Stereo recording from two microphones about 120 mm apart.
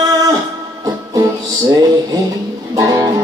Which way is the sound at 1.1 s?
30° right (ahead or behind).